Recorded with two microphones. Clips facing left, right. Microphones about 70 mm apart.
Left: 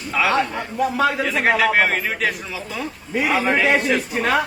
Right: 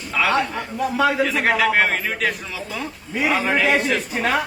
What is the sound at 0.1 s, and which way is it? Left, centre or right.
A man's voice, centre.